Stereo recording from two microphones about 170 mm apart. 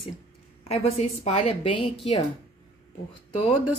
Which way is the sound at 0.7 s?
40° left (ahead or behind).